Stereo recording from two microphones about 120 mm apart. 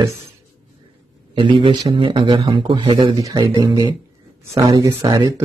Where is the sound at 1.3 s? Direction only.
45° right (ahead or behind).